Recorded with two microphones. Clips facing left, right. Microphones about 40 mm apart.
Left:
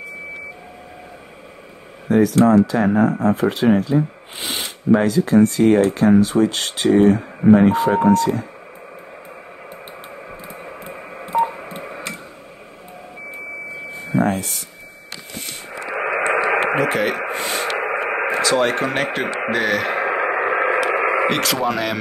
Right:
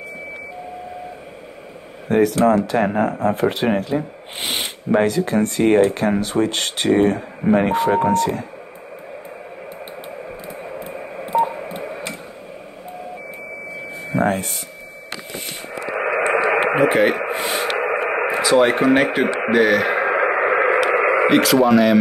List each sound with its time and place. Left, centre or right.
2.0 s speech: right
10.6 s a sound: centre
11.2 s telephone dialing: centre
14.1 s speech: right
15.9 s radio: centre
16.5 s radio: centre
17.3 s a sound: centre
17.7 s radio: centre
18.4 s speech: centre
19.4 s radio: centre